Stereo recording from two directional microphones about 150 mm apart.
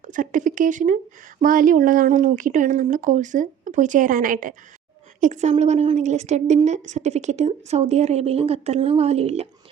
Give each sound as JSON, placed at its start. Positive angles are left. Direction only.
{"t": 0.1, "sound": "speech", "side_deg": -60}
{"t": 5.2, "sound": "a woman's voice", "side_deg": -50}